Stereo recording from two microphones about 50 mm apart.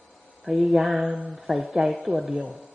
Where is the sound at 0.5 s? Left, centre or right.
Centre.